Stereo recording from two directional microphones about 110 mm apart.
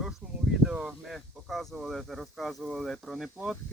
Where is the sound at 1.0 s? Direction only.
Centre (ahead or behind).